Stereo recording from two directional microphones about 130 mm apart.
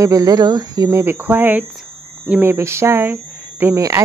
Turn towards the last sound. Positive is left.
turn(degrees=-20)  # may be behind; listen again after turning